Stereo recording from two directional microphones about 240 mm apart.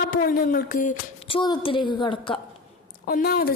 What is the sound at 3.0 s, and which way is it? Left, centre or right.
Speech, left.